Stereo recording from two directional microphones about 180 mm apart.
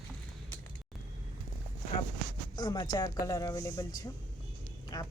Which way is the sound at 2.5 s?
20° left (ahead or behind).